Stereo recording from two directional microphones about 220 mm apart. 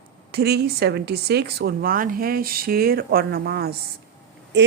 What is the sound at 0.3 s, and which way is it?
Speech, 45° right (ahead or behind).